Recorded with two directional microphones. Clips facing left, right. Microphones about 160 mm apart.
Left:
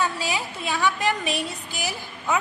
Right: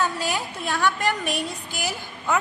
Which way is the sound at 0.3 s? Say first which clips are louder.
Right 1 dB; 5° left (ahead or behind).